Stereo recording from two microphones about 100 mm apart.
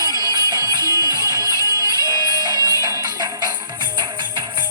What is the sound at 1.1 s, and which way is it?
Music, 35° left (ahead or behind).